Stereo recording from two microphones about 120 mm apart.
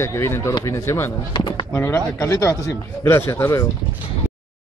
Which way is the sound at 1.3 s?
40° left (ahead or behind).